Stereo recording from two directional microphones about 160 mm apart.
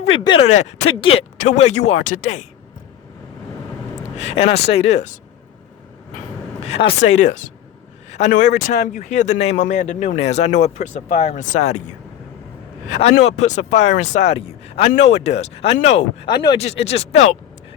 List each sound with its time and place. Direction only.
0.0 s speech: 35° left (ahead or behind); by 2.4 s 50° left (ahead or behind)
4.2 s speech: 40° left (ahead or behind)
6.6 s speech: 40° left (ahead or behind)
12.9 s speech: 45° left (ahead or behind)
16.2 s speech: 25° left (ahead or behind)
16.6 s speech: 40° left (ahead or behind)